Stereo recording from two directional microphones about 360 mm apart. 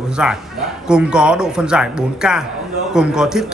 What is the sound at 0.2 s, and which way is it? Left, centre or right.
Speech, centre.